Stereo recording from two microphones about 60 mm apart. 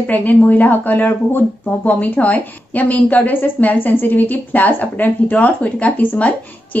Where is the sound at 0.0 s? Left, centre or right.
Left.